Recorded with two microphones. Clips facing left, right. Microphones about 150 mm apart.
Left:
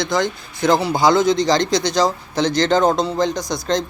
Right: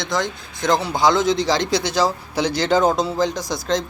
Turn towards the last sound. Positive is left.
turn(degrees=0)  # may be behind; listen again after turning